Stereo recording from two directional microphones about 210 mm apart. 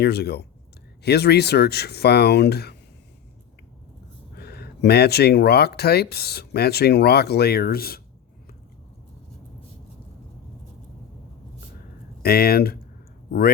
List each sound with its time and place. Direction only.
0.0 s speech: 50° left (ahead or behind)
4.4 s speech: 50° left (ahead or behind)
12.2 s speech: 45° left (ahead or behind)